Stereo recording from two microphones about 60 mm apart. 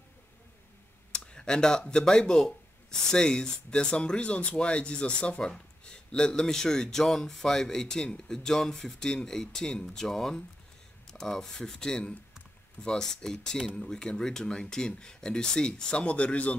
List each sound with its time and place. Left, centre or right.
1.1 s speech: centre